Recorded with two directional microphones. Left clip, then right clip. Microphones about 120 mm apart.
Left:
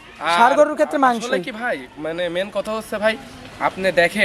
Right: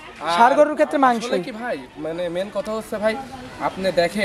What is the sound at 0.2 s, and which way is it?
A man's voice, centre (ahead or behind).